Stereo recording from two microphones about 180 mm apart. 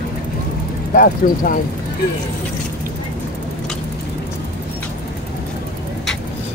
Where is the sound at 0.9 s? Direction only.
50° left (ahead or behind).